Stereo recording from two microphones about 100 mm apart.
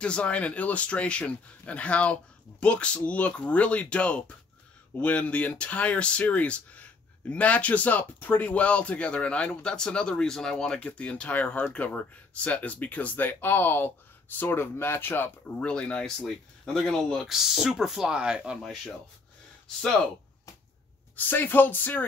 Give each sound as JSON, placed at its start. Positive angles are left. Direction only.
{"t": 0.0, "sound": "speech", "side_deg": 10}
{"t": 21.3, "sound": "speech", "side_deg": 20}